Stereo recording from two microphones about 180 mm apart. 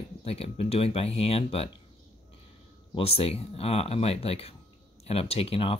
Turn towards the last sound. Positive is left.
turn(degrees=30)  # may be behind; listen again after turning